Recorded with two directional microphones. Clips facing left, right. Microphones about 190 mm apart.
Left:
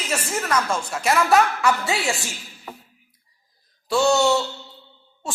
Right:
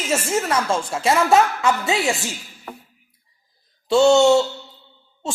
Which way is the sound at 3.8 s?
25° right (ahead or behind).